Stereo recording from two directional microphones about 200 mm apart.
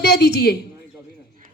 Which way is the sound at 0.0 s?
55° left (ahead or behind).